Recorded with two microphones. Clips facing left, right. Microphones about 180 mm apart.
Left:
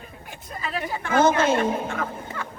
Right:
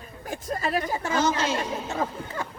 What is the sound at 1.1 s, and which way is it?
Speech, 55° left (ahead or behind).